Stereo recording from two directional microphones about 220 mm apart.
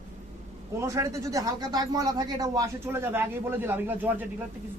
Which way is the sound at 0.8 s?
15° right (ahead or behind).